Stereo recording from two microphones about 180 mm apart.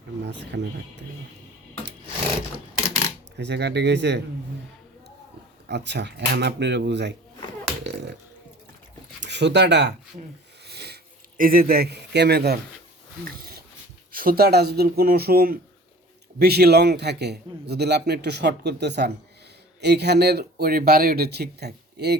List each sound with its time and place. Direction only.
0.3 s a man's voice: 75° right (ahead or behind)
3.3 s a man's voice: 70° right (ahead or behind)
5.6 s a man's voice: 75° right (ahead or behind)
9.2 s speech: 75° right (ahead or behind)
10.7 s sniff: 65° right (ahead or behind)
13.2 s a man's voice: 55° right (ahead or behind)